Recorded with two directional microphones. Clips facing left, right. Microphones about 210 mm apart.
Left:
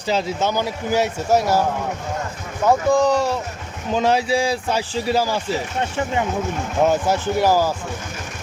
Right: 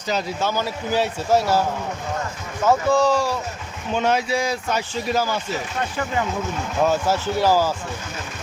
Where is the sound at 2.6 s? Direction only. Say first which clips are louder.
Left 1 dB; 15° left (ahead or behind).